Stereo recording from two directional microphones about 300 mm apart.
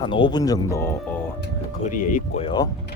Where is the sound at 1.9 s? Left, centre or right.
Left.